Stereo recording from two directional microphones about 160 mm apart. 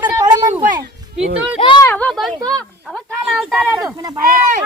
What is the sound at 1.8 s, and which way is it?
Speech, 10° left (ahead or behind).